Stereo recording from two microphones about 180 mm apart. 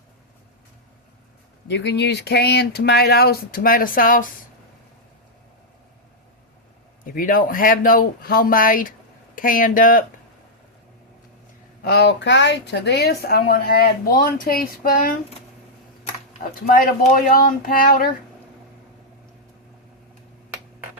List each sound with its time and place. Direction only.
1.6 s a woman's voice: 75° left (ahead or behind); by 4.3 s 50° left (ahead or behind)
7.0 s speech: 50° left (ahead or behind)
11.8 s a woman's voice: 65° left (ahead or behind)
16.6 s speech: 50° left (ahead or behind)